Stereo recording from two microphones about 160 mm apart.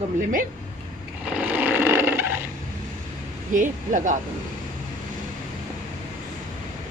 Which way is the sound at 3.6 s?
55° right (ahead or behind).